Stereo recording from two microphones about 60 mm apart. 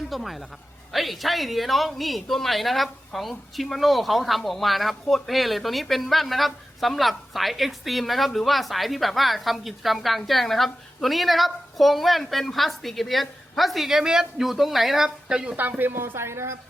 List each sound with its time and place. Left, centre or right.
0.1 s speech: centre
15.5 s speech: right